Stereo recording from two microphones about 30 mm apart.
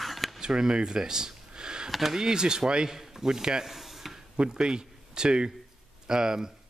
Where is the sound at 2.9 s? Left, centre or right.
Centre.